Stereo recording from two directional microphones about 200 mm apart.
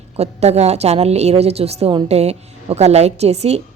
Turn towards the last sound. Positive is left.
turn(degrees=-30)  # may be behind; listen again after turning